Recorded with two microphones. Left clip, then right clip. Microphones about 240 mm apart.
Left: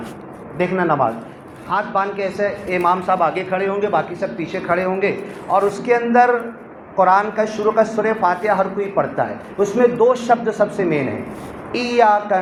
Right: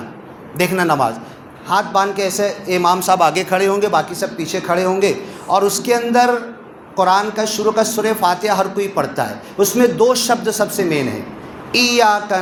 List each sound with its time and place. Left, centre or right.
0.5 s a man's voice: right